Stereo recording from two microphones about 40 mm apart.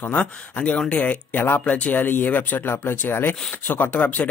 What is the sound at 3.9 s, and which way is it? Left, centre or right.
Speech, left.